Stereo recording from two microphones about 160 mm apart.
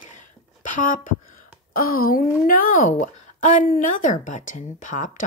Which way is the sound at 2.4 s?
60° left (ahead or behind).